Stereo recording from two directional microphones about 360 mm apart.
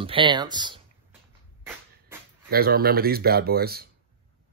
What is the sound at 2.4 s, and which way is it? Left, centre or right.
Speech, right.